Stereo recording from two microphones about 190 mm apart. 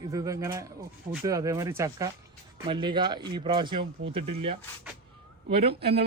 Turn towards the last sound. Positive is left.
turn(degrees=-55)  # may be behind; listen again after turning